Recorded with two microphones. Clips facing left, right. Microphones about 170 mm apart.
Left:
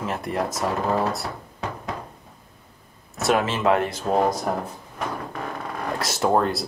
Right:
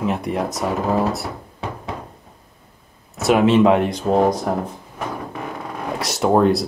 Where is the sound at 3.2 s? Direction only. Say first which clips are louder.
Right 8 dB; centre (ahead or behind).